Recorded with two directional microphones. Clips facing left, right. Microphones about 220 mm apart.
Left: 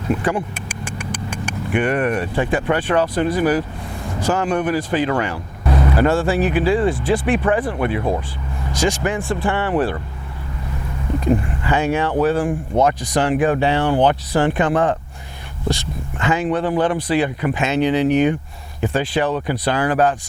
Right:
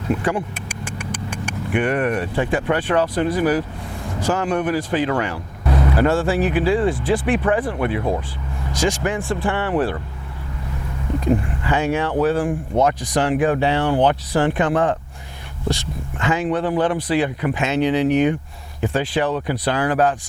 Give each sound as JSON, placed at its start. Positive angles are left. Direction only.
{"t": 0.1, "sound": "speech", "side_deg": 20}
{"t": 4.0, "sound": "vehicle", "side_deg": 25}
{"t": 4.3, "sound": "speech", "side_deg": 15}
{"t": 11.6, "sound": "speech", "side_deg": 15}